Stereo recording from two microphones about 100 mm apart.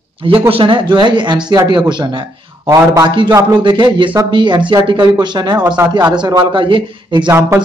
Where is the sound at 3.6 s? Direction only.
50° right (ahead or behind).